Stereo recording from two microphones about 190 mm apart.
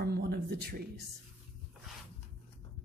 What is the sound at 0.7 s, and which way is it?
Speech, 55° right (ahead or behind).